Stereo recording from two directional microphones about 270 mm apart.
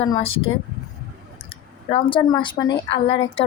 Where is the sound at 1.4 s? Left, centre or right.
Left.